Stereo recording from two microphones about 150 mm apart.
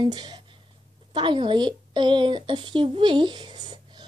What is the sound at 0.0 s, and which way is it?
A woman's voice, 30° right (ahead or behind).